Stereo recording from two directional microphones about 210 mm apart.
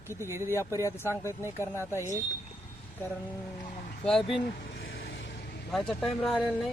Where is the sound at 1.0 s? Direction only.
15° left (ahead or behind).